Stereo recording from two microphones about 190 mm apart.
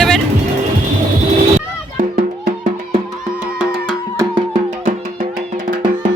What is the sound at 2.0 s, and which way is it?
Music, 50° right (ahead or behind).